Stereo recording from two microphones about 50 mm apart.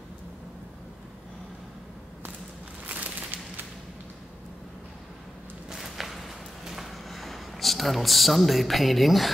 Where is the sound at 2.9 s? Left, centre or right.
Right.